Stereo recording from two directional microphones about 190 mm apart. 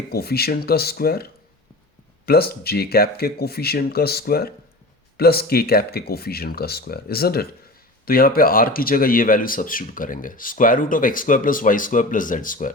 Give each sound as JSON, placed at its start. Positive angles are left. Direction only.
{"t": 0.1, "sound": "speech", "side_deg": 55}